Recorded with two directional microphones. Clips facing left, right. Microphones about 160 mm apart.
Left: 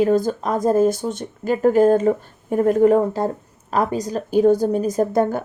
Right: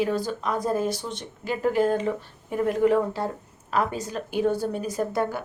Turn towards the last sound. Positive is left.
turn(degrees=45)  # may be behind; listen again after turning